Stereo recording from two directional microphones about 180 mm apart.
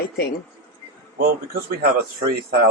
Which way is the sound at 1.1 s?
60° right (ahead or behind).